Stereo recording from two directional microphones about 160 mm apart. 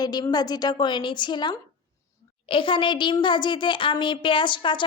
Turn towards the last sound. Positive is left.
turn(degrees=30)  # may be behind; listen again after turning